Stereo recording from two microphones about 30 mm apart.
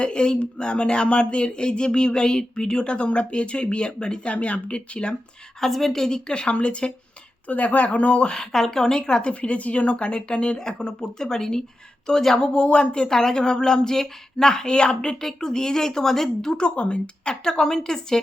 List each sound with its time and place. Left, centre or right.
0.0 s speech: left
4.3 s speech: left
5.9 s speech: left
7.4 s speech: left
8.4 s speech: centre
9.3 s speech: left; by 11.6 s centre
12.4 s speech: left
13.1 s speech: centre
16.5 s speech: left
17.5 s speech: centre